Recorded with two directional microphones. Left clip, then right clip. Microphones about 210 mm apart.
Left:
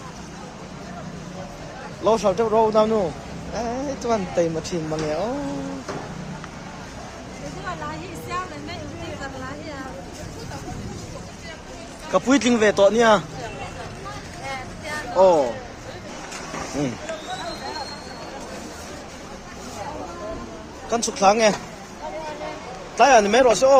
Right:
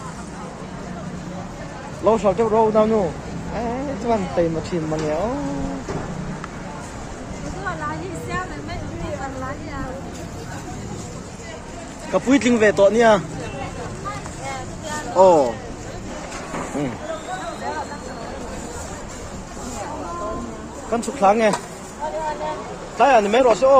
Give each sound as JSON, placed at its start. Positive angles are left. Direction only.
{"t": 2.0, "sound": "speech", "side_deg": 25}
{"t": 4.1, "sound": "speech", "side_deg": 20}
{"t": 12.1, "sound": "speech", "side_deg": 20}
{"t": 15.1, "sound": "speech", "side_deg": 0}
{"t": 20.9, "sound": "speech", "side_deg": 25}
{"t": 23.0, "sound": "speech", "side_deg": 35}